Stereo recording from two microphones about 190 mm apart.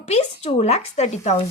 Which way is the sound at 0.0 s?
35° left (ahead or behind).